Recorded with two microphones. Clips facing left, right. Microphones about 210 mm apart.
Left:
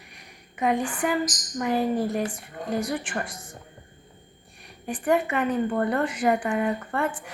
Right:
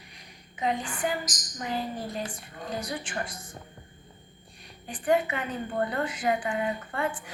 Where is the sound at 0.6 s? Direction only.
65° left (ahead or behind).